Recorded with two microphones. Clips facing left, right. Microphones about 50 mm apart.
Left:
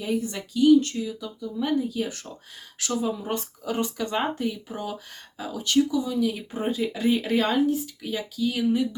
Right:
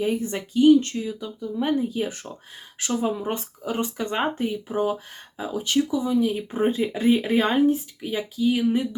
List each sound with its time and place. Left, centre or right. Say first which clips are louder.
0.0 s speech: right 3 dB; right
3.2 s speech: right 1 dB; right